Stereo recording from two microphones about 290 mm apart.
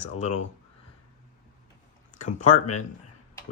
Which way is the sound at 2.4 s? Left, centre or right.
Left.